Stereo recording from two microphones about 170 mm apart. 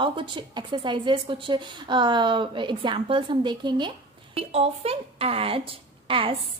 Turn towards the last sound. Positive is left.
turn(degrees=-30)  # may be behind; listen again after turning